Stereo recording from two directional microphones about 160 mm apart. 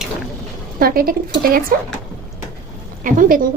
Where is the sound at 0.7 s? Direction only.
65° right (ahead or behind).